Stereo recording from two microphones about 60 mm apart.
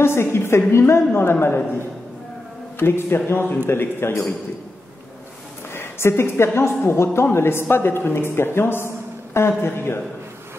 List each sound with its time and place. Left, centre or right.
0.0 s a man's voice: left
5.7 s a man's voice: left